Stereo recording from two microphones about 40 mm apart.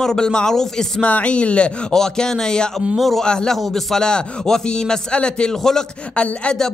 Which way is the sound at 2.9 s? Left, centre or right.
Centre.